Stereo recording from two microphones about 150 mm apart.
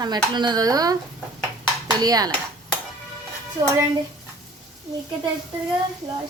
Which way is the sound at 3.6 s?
25° right (ahead or behind).